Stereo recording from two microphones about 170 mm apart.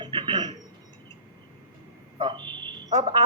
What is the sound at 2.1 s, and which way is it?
Speech, 25° right (ahead or behind).